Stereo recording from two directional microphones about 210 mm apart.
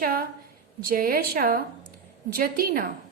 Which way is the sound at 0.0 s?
45° right (ahead or behind).